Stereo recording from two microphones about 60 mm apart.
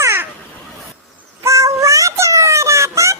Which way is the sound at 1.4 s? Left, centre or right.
Right.